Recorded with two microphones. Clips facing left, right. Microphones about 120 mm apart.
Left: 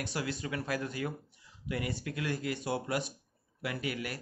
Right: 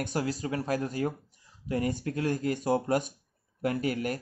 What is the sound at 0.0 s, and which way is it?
Speech, 40° right (ahead or behind).